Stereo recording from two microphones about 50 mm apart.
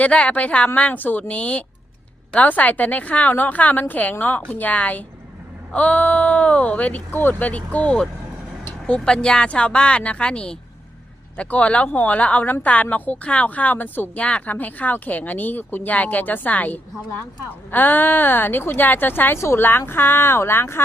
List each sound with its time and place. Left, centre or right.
0.0 s a woman's voice: left
0.9 s a woman's voice: left
7.1 s speech: left
8.9 s a woman's voice: centre; by 14.1 s left
14.2 s a woman's voice: left
19.4 s a woman's voice: left
19.8 s speech: left